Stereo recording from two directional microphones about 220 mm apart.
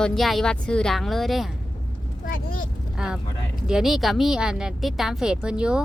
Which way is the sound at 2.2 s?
40° left (ahead or behind).